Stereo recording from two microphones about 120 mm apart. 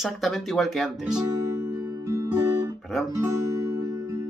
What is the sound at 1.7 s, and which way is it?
Music, 25° right (ahead or behind).